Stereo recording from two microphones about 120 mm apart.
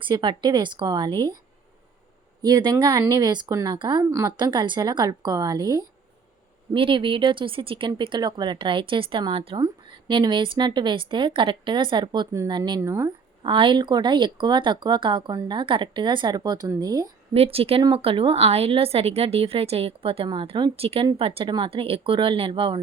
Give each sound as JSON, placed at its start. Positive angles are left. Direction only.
{"t": 0.0, "sound": "a woman's voice", "side_deg": -40}
{"t": 2.4, "sound": "a woman's voice", "side_deg": -35}
{"t": 3.8, "sound": "a woman's voice", "side_deg": -40}
{"t": 6.7, "sound": "speech", "side_deg": -45}
{"t": 9.6, "sound": "a woman's voice", "side_deg": -35}
{"t": 12.8, "sound": "speech", "side_deg": -20}
{"t": 13.1, "sound": "a woman's voice", "side_deg": -45}
{"t": 17.3, "sound": "speech", "side_deg": -55}